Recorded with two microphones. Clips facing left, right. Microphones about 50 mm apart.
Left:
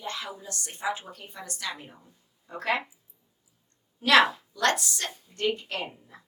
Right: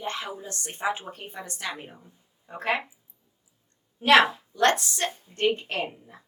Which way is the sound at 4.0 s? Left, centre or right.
Right.